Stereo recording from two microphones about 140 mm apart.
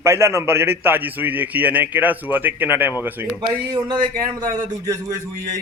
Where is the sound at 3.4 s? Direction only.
35° right (ahead or behind).